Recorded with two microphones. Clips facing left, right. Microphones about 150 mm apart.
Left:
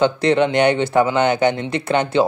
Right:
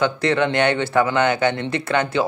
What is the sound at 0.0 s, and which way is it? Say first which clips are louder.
Speech: left 4 dB; 20° left (ahead or behind).